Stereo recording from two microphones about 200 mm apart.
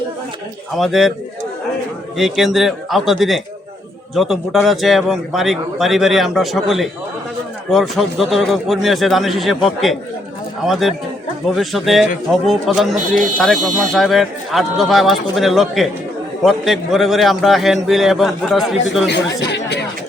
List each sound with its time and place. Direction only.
0.8 s a man's voice: centre (ahead or behind)
2.1 s a man's voice: centre (ahead or behind)
19.0 s speech: 60° left (ahead or behind)